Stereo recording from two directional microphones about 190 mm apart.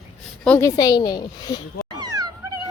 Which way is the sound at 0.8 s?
20° left (ahead or behind).